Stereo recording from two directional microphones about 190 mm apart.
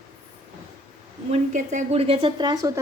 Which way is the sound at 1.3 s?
35° right (ahead or behind).